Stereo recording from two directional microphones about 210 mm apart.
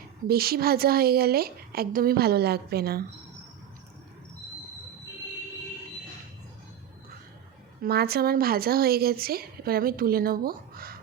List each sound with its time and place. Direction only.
0.3 s speech: 45° right (ahead or behind)
7.8 s speech: 50° right (ahead or behind)